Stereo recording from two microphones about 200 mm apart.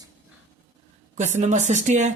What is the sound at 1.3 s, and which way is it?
Speech, 35° right (ahead or behind).